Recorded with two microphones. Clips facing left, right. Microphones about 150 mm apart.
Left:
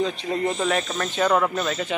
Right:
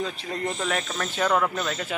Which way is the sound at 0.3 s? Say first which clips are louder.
Left 4 dB; 5° left (ahead or behind).